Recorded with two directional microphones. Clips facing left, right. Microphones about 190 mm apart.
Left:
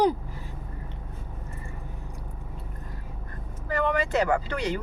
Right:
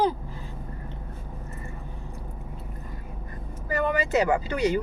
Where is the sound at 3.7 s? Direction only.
5° right (ahead or behind).